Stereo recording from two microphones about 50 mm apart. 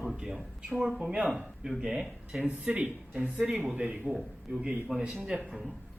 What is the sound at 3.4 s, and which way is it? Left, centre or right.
Speech, centre.